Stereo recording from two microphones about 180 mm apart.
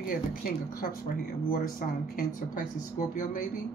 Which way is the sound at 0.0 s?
50° left (ahead or behind).